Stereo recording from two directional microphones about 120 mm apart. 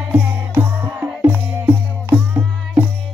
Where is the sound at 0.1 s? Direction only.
15° right (ahead or behind).